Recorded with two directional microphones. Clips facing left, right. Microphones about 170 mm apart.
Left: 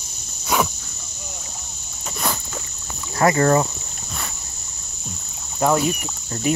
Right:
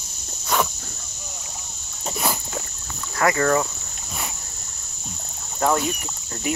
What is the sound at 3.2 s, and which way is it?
Speech, 30° left (ahead or behind).